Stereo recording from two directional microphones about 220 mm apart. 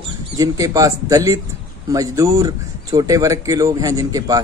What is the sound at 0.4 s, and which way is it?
Speech, 15° right (ahead or behind).